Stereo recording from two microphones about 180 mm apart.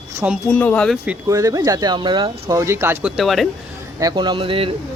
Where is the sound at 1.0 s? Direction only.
15° right (ahead or behind).